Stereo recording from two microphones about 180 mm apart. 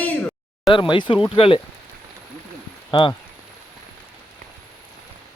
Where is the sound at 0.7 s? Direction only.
25° left (ahead or behind).